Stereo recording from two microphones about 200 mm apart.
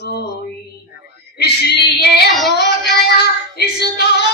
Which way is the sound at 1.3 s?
55° left (ahead or behind).